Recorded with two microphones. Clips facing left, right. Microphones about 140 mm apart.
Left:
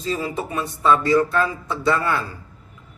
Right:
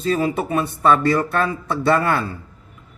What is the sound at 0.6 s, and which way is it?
Speech, 60° right (ahead or behind).